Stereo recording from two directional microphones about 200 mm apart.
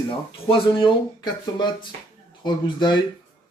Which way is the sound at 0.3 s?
25° left (ahead or behind).